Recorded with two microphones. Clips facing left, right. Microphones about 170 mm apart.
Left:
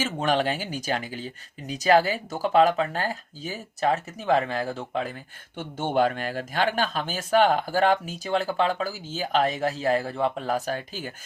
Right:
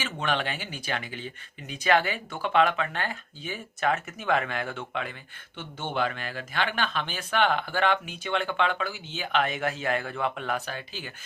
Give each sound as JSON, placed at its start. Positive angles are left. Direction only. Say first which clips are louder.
{"t": 0.0, "sound": "speech", "louder": "left 5 dB", "side_deg": 40}
{"t": 5.5, "sound": "speech", "louder": "left 6 dB", "side_deg": 50}